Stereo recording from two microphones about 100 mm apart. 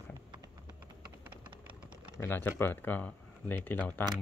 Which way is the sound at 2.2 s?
20° left (ahead or behind).